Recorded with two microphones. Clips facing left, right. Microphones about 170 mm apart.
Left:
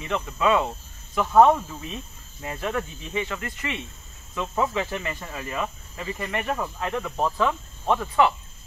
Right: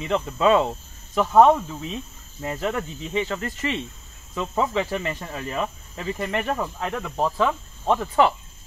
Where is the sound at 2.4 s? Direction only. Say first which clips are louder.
Right 4 dB; 20° right (ahead or behind).